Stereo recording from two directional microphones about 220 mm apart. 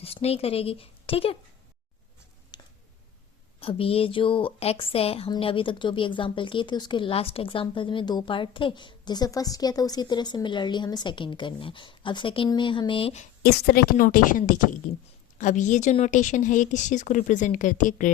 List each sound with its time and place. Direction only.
0.0 s speech: 25° left (ahead or behind)
2.5 s a sound: 20° left (ahead or behind)
3.6 s a woman's voice: 25° left (ahead or behind)
13.4 s a woman's voice: 45° left (ahead or behind)